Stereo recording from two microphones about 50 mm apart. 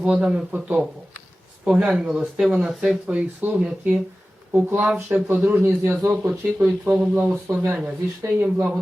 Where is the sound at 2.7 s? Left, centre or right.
Centre.